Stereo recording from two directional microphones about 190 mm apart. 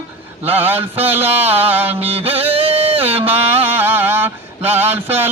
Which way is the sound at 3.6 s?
10° right (ahead or behind).